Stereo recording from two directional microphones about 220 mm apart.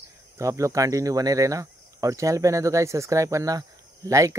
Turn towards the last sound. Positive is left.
turn(degrees=-15)  # may be behind; listen again after turning